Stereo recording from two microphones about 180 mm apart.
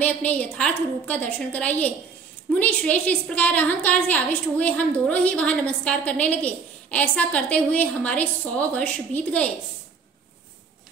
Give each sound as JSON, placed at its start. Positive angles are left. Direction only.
{"t": 0.0, "sound": "a woman's voice", "side_deg": 10}